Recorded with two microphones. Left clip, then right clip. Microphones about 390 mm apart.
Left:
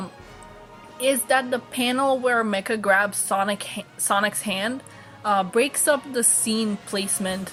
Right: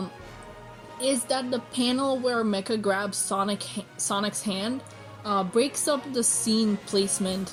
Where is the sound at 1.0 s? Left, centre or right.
Left.